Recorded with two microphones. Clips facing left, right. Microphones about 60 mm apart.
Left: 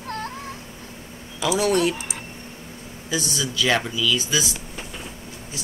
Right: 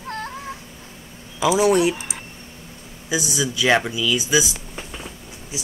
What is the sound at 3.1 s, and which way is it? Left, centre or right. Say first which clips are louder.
Speech: right 3 dB; centre.